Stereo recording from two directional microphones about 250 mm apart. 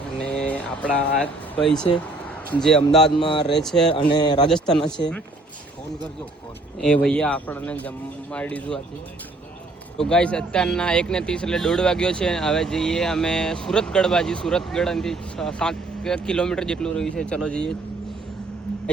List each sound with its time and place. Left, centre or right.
0.2 s a sound: centre
1.6 s speech: centre
3.2 s speech: left
3.5 s speech: centre
4.2 s a man's voice: centre
4.4 s speech: centre
6.8 s speech: centre
10.0 s speech: centre